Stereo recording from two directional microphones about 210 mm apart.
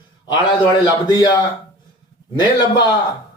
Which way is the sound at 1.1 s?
20° left (ahead or behind).